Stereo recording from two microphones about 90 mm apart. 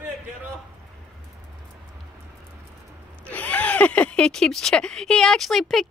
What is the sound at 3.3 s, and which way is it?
Speech, 15° left (ahead or behind).